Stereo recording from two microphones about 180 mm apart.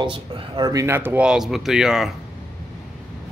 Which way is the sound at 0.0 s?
25° right (ahead or behind).